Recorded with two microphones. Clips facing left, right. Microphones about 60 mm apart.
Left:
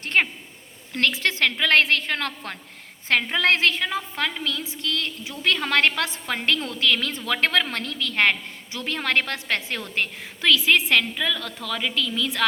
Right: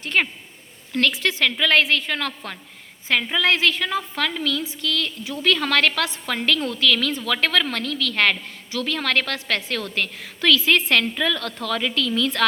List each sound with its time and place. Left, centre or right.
0.1 s a sound: left
1.2 s a woman's voice: left
3.9 s a woman's voice: centre
10.7 s a woman's voice: centre